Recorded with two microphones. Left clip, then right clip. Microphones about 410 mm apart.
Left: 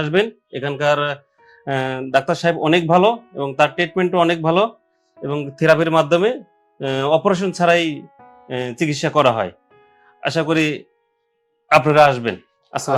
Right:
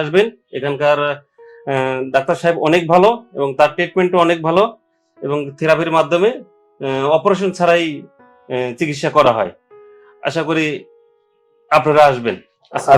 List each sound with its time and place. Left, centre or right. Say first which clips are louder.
0.0 s speech: right 4 dB; left